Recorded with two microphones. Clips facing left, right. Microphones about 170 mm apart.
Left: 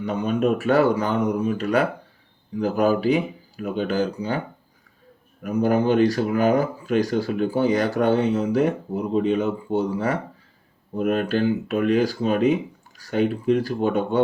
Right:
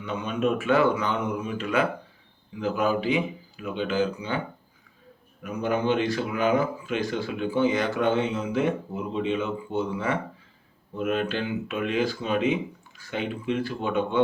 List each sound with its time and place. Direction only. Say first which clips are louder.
0.0 s speech: left 5 dB; 40° left (ahead or behind)